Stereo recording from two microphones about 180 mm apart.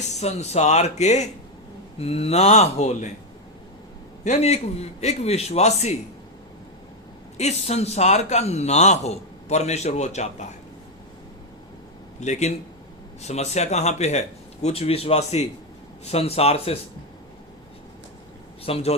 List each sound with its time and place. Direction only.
0.0 s a man's voice: 40° left (ahead or behind)
4.2 s a man's voice: 40° left (ahead or behind)
7.3 s a man's voice: 35° left (ahead or behind)
12.2 s a man's voice: 40° left (ahead or behind)
18.6 s a man's voice: 35° left (ahead or behind)